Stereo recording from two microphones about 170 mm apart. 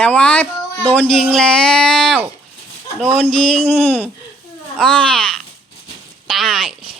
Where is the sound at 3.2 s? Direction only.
5° left (ahead or behind).